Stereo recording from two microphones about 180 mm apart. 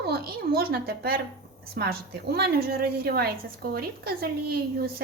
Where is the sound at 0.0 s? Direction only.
60° right (ahead or behind).